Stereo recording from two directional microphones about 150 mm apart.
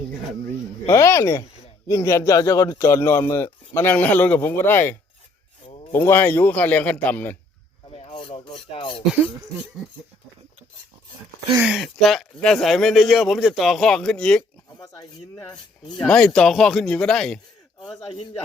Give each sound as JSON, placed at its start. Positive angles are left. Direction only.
{"t": 0.9, "sound": "speech", "side_deg": 20}
{"t": 7.9, "sound": "filing", "side_deg": 40}
{"t": 11.6, "sound": "speech", "side_deg": 0}
{"t": 14.8, "sound": "speech", "side_deg": 25}
{"t": 16.0, "sound": "speech", "side_deg": 5}